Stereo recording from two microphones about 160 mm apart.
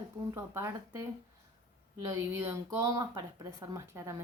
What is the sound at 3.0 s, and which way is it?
A woman's voice, 25° right (ahead or behind).